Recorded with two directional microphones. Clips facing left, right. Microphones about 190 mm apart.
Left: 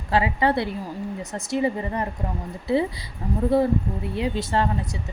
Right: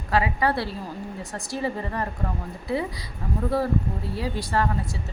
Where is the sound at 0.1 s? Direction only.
25° left (ahead or behind).